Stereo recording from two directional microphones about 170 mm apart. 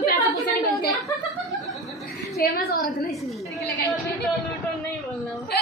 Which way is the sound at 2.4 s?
60° left (ahead or behind).